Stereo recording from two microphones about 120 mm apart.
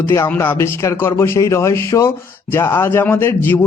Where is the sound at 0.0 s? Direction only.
20° left (ahead or behind).